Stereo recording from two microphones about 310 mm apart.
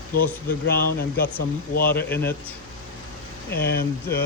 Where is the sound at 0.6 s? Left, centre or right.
Left.